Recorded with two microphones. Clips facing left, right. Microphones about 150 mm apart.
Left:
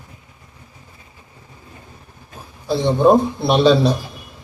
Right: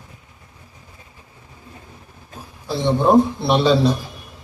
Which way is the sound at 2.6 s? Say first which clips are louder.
Left 3 dB; centre (ahead or behind).